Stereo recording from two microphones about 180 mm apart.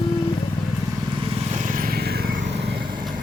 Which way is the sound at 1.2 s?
40° right (ahead or behind).